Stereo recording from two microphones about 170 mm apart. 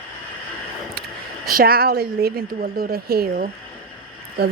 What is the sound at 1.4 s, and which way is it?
A woman's voice, 60° right (ahead or behind).